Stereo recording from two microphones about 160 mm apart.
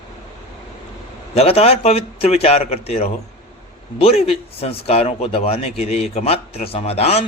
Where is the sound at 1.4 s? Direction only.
40° left (ahead or behind).